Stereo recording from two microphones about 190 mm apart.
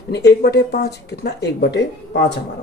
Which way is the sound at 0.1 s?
60° left (ahead or behind).